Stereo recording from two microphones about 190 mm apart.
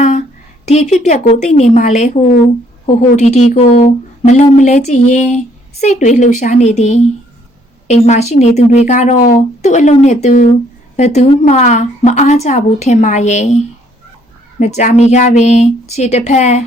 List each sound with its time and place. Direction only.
0.0 s a woman's voice: 40° left (ahead or behind)
14.6 s a woman's voice: 40° left (ahead or behind)